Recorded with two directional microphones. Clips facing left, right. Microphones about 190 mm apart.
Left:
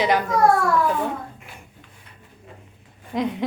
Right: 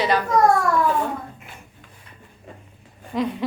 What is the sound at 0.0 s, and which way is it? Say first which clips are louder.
Speech: left 1 dB; 15° left (ahead or behind).